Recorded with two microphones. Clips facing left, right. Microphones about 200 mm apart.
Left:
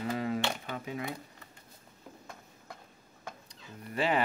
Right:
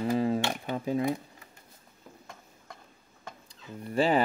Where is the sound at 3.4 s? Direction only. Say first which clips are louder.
Right 6 dB; 30° right (ahead or behind).